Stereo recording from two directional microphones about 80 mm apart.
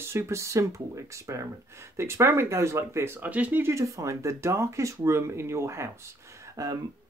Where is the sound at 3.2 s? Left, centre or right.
Centre.